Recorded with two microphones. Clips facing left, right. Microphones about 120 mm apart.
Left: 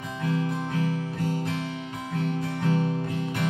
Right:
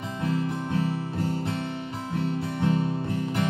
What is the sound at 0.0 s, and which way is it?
Music, 25° right (ahead or behind).